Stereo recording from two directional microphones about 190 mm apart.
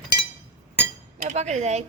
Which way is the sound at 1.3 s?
35° right (ahead or behind).